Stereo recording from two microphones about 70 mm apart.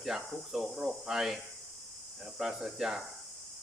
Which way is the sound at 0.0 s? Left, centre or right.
Centre.